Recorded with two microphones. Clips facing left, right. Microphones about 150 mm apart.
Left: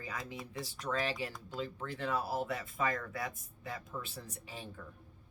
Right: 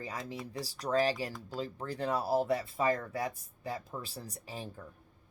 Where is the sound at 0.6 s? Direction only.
35° right (ahead or behind).